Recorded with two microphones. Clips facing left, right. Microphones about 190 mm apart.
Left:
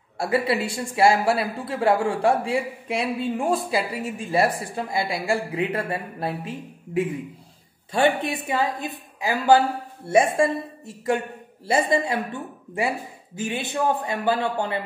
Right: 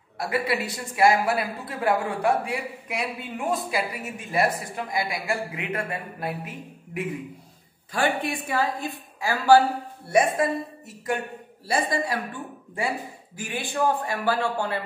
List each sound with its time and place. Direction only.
0.2 s a woman's voice: 30° left (ahead or behind)
11.6 s a woman's voice: 25° left (ahead or behind)